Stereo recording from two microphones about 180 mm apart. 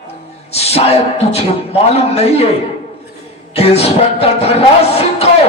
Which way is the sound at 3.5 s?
35° left (ahead or behind).